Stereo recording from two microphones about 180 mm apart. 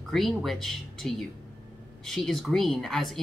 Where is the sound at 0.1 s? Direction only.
Centre (ahead or behind).